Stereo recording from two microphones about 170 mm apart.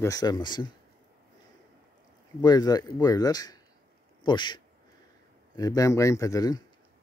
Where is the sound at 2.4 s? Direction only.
25° left (ahead or behind).